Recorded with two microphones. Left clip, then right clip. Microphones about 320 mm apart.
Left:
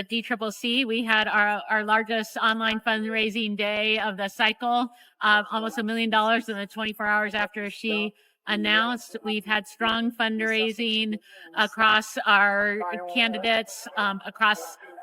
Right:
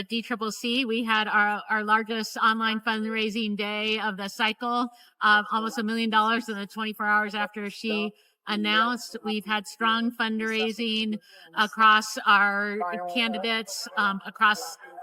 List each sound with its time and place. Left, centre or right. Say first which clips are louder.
0.3 s a woman's voice: left 1 dB; centre
12.8 s speech: right 1 dB; right
13.1 s a woman's voice: left 5 dB; centre